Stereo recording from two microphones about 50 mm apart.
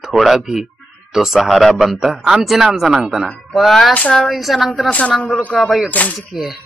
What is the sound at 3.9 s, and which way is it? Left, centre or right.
Speech, left.